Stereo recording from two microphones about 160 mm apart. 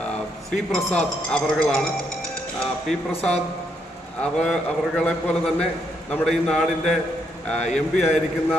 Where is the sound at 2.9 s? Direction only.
Centre (ahead or behind).